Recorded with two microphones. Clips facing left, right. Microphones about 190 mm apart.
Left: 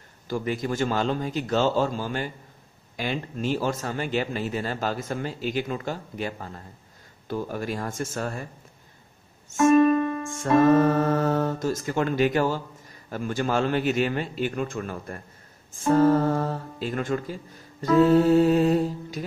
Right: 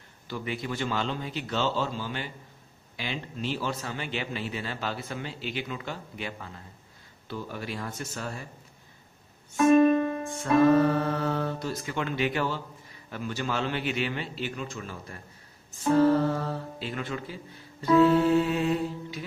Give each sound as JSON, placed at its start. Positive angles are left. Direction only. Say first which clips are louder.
{"t": 0.3, "sound": "speech", "louder": "left 6 dB", "side_deg": 45}
{"t": 9.8, "sound": "music", "louder": "left 2 dB", "side_deg": -25}
{"t": 10.8, "sound": "speech", "louder": "left 4 dB", "side_deg": 45}